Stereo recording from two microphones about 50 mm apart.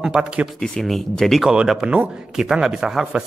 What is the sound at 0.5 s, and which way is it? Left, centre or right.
Speech, centre.